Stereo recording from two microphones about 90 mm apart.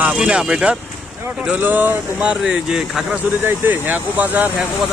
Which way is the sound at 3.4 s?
20° right (ahead or behind).